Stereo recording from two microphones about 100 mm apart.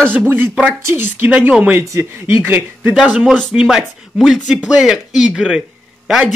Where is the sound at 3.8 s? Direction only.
Centre (ahead or behind).